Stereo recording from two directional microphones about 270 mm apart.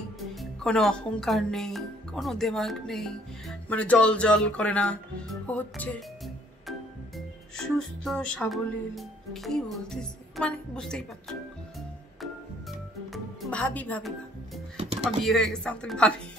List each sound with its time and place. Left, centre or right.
0.3 s speech: centre
13.1 s music: centre
14.8 s music: right
15.0 s speech: centre